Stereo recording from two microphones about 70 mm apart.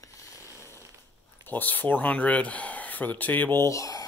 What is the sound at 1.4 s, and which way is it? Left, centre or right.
Speech, left.